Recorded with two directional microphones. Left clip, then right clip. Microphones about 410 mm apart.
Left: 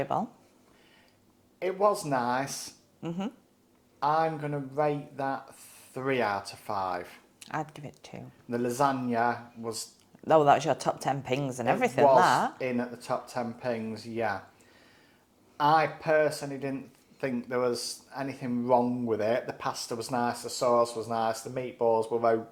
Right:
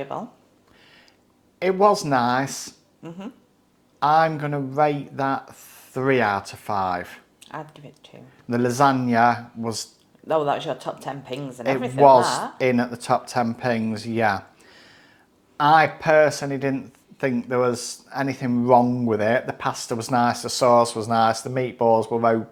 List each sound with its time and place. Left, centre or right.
0.0 s speech: left
1.5 s speech: right
3.0 s speech: left
4.0 s speech: right
7.3 s speech: left
8.4 s speech: right
10.2 s speech: left
12.5 s speech: right